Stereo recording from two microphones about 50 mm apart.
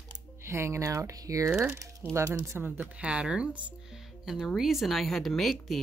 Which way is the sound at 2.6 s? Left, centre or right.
Right.